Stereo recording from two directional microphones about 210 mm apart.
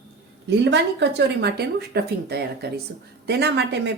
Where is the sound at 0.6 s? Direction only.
55° right (ahead or behind).